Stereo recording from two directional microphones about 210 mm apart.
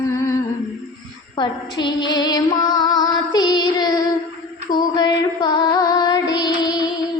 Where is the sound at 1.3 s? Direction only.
20° left (ahead or behind).